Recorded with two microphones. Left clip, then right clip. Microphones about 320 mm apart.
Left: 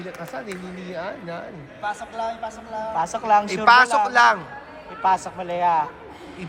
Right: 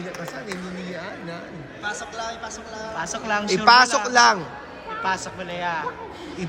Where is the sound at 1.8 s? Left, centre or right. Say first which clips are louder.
Left 3 dB; left.